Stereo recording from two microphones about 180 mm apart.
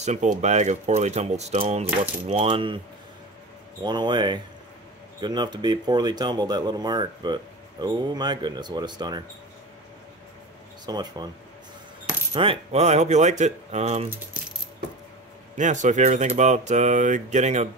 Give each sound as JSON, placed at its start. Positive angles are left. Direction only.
{"t": 0.0, "sound": "speech", "side_deg": -40}
{"t": 3.8, "sound": "speech", "side_deg": -25}
{"t": 10.9, "sound": "speech", "side_deg": -25}
{"t": 12.3, "sound": "speech", "side_deg": -35}
{"t": 14.3, "sound": "coin", "side_deg": -5}
{"t": 15.5, "sound": "speech", "side_deg": -45}